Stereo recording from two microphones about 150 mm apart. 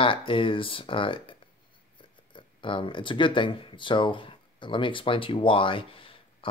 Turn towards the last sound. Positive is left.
turn(degrees=35)  # may be behind; listen again after turning